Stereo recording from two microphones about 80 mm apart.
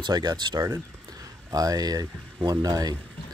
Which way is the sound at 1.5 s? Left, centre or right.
Right.